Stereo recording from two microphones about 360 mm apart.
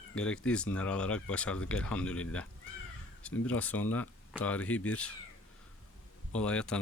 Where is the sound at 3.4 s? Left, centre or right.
Centre.